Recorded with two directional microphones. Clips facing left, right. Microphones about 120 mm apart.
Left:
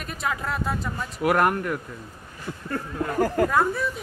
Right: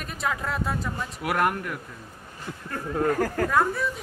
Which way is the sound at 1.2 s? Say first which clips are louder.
Left 5 dB; 40° left (ahead or behind).